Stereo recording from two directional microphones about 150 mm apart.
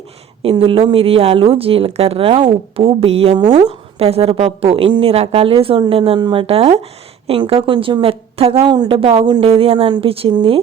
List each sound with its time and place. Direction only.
0.5 s speech: 35° right (ahead or behind)